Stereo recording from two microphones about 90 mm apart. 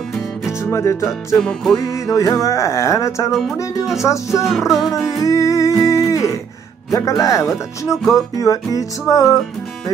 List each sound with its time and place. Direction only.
0.6 s music: 30° left (ahead or behind)
1.4 s music: 5° left (ahead or behind)
1.9 s music: 35° left (ahead or behind)
3.3 s music: centre (ahead or behind)
4.0 s music: 35° left (ahead or behind)
4.4 s music: 5° right (ahead or behind)
5.2 s music: 40° left (ahead or behind)
5.9 s a sound: 40° left (ahead or behind)
6.9 s music: 35° left (ahead or behind)
7.9 s music: centre (ahead or behind)
8.4 s music: 40° left (ahead or behind)